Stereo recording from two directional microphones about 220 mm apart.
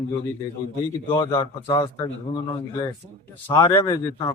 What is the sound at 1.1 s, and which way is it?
Speech, 20° left (ahead or behind).